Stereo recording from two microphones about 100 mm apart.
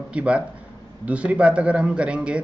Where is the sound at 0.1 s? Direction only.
10° right (ahead or behind).